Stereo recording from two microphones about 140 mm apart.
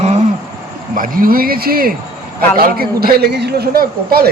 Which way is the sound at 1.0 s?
85° right.